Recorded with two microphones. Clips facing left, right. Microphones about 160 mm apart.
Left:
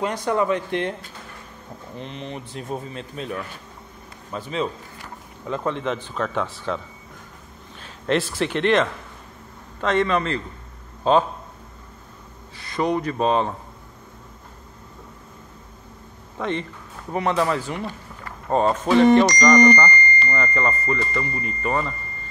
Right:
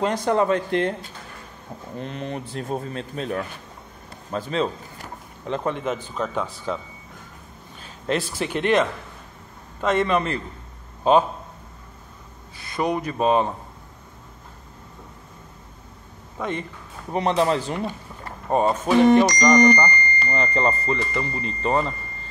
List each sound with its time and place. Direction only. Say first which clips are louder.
0.0 s speech: right 2 dB; 35° right (ahead or behind)
2.0 s speech: right 3 dB; 45° right (ahead or behind)
5.5 s speech: even; 15° right (ahead or behind)
8.1 s speech: left 2 dB; centre (ahead or behind)
12.7 s speech: left 1 dB; 10° right (ahead or behind)
16.3 s speech: left 2 dB; 10° right (ahead or behind)
17.1 s speech: right 1 dB; 25° right (ahead or behind)
17.8 s speech: right 2 dB; 15° right (ahead or behind)